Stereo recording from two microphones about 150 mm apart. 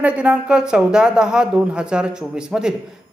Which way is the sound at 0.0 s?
10° right (ahead or behind).